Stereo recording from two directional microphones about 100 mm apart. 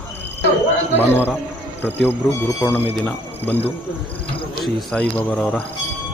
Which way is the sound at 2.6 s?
20° left (ahead or behind).